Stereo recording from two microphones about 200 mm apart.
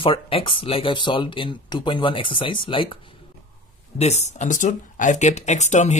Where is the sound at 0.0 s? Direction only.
25° left (ahead or behind).